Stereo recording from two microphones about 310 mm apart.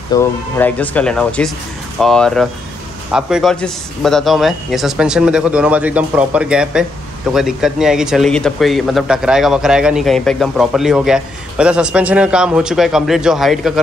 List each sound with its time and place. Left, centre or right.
0.1 s a man's voice: centre